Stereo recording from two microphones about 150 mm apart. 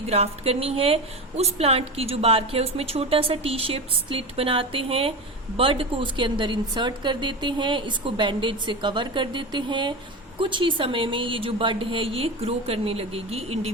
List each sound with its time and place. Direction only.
0.1 s a woman's voice: 45° right (ahead or behind)